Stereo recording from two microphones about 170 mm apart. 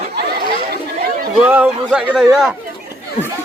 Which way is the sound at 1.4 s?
10° right (ahead or behind).